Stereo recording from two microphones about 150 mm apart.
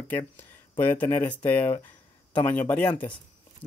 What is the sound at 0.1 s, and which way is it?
Speech, 10° left (ahead or behind).